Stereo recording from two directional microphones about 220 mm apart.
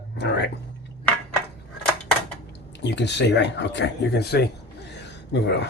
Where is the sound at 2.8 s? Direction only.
50° left (ahead or behind).